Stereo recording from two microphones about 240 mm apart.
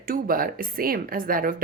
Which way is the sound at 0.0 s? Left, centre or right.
Right.